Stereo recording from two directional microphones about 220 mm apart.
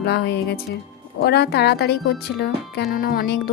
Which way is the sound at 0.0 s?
50° left (ahead or behind).